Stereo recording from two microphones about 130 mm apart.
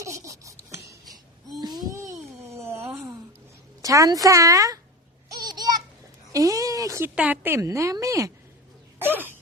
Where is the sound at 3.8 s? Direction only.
25° right (ahead or behind).